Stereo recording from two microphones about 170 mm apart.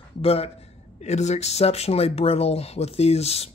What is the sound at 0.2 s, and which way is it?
Speech, 35° left (ahead or behind).